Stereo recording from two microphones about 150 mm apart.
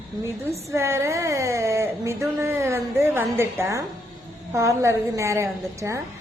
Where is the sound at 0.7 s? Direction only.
20° right (ahead or behind).